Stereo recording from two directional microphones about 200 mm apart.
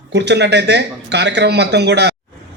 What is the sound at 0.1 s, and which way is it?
Speech, 60° right (ahead or behind).